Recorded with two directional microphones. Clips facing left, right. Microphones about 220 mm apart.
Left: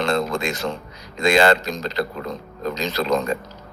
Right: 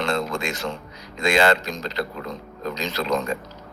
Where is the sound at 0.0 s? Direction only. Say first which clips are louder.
Left 3 dB; 35° left (ahead or behind).